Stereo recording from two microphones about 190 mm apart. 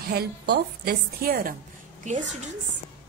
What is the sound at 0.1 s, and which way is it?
A woman's voice, 55° right (ahead or behind).